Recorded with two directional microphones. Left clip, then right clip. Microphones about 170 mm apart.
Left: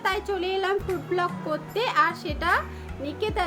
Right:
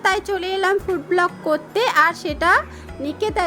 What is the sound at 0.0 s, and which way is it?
Speech, 45° right (ahead or behind).